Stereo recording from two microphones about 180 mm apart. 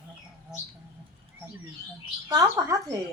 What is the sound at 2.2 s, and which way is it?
Speech, 20° right (ahead or behind).